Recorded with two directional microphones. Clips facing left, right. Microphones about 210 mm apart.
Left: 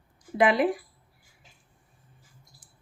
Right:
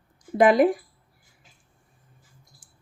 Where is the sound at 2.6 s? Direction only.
50° right (ahead or behind).